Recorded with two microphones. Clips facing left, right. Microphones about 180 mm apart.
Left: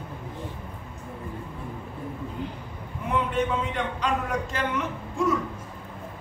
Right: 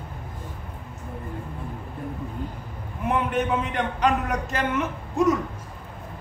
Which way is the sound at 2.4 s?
45° right (ahead or behind).